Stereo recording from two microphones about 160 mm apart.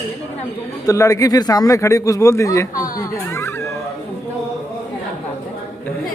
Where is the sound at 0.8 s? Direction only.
20° left (ahead or behind).